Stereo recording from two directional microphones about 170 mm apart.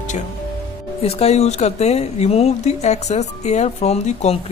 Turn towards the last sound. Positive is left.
turn(degrees=40)  # may be behind; listen again after turning